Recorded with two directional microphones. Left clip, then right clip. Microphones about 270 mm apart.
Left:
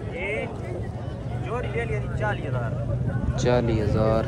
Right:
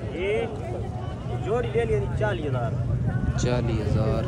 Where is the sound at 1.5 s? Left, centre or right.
Right.